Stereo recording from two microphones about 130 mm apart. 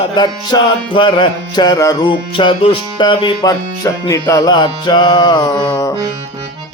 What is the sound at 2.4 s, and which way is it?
Music, 40° left (ahead or behind).